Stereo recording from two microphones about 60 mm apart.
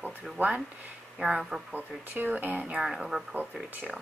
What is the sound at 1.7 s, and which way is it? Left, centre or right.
Speech, right.